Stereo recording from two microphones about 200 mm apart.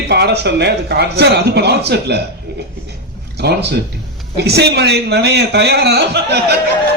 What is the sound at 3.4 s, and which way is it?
Speech, 55° right (ahead or behind).